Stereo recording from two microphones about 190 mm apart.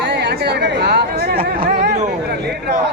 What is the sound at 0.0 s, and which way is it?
Chatter, 60° right (ahead or behind).